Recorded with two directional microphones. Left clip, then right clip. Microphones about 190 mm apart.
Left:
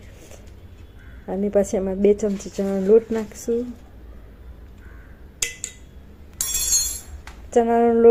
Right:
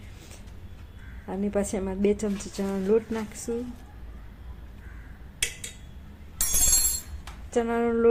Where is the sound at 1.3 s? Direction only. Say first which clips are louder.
Left 8 dB; 10° left (ahead or behind).